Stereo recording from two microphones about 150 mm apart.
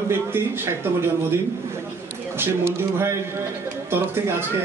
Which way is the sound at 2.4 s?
15° right (ahead or behind).